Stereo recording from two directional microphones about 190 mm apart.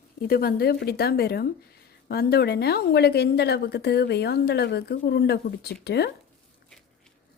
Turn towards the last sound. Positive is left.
turn(degrees=60)  # may be behind; listen again after turning